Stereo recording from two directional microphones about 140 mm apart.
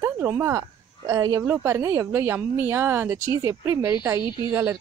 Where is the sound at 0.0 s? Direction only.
20° right (ahead or behind).